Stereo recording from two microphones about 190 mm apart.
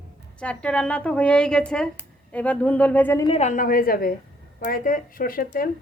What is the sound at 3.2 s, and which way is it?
Speech, 35° left (ahead or behind).